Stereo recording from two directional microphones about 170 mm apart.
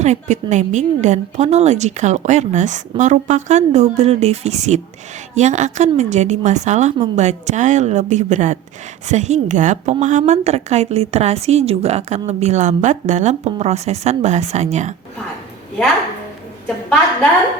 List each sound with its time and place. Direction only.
0.0 s a woman's voice: 45° right (ahead or behind)